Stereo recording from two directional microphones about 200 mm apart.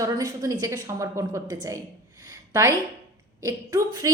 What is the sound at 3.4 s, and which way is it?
Speech, 15° right (ahead or behind).